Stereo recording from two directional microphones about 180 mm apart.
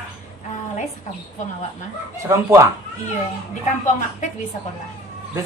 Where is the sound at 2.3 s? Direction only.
15° right (ahead or behind).